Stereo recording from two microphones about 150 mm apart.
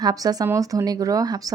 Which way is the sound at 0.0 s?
25° right (ahead or behind).